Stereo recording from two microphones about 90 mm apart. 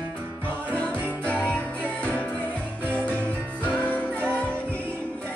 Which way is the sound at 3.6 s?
15° right (ahead or behind).